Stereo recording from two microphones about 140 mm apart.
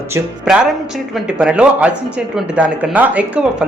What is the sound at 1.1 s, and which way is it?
Speech, 5° right (ahead or behind).